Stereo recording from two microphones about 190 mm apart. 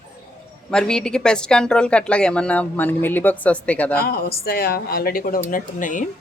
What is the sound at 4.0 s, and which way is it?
A woman's voice, 55° left (ahead or behind).